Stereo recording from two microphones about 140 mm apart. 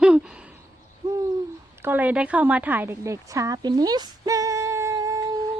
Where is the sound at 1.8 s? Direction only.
15° right (ahead or behind).